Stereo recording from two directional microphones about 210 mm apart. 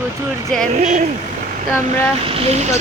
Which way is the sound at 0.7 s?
35° right (ahead or behind).